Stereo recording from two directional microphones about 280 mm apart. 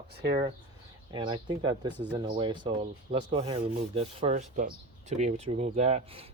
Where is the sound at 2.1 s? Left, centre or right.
Centre.